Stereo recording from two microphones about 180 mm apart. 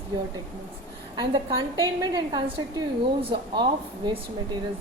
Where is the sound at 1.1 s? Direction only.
25° right (ahead or behind).